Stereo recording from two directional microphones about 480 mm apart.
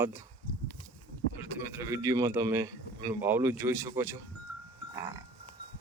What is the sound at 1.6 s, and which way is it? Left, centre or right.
A man's voice, centre.